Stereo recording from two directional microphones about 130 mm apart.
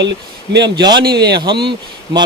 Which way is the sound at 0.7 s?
30° right (ahead or behind).